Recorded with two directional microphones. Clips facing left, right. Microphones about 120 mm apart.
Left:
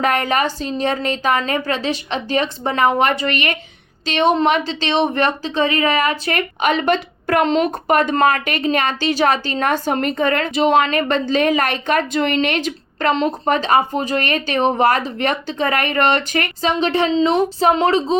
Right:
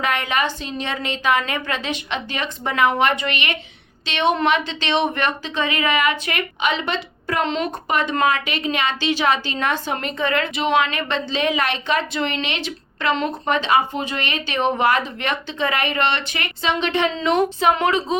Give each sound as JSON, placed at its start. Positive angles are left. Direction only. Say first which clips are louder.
{"t": 0.0, "sound": "a woman's voice", "louder": "left 4 dB", "side_deg": 40}